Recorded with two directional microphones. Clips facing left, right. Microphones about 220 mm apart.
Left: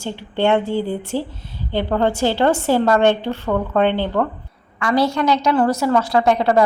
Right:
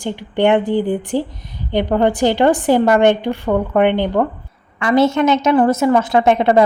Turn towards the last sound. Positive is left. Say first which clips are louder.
# right 3 dB
turn(degrees=-20)  # may be behind; listen again after turning